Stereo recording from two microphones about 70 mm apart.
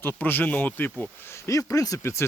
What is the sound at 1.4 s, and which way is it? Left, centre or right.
Speech, left.